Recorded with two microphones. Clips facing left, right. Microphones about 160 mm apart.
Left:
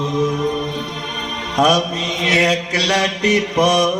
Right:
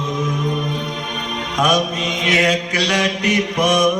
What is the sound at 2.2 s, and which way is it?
Mantra, 35° left (ahead or behind).